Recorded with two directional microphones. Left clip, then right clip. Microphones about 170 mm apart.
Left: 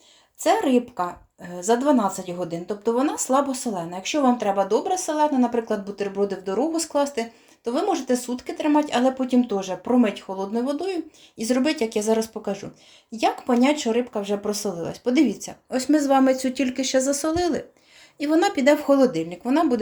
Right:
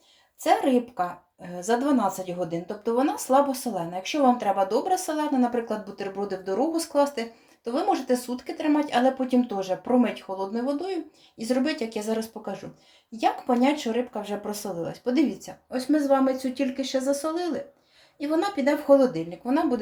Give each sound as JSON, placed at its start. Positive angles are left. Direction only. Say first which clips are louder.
{"t": 0.4, "sound": "a woman's voice", "louder": "left 2 dB", "side_deg": 30}